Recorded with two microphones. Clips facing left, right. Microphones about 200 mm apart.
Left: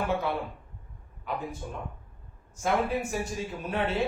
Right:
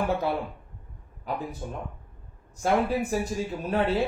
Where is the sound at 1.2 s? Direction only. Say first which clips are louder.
Right 2 dB; 40° right (ahead or behind).